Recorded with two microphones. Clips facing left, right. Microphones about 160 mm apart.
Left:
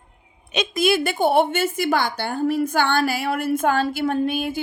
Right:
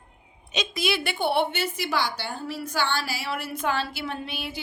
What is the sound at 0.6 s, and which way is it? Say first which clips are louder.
A woman's voice: left 7 dB; 50° left (ahead or behind).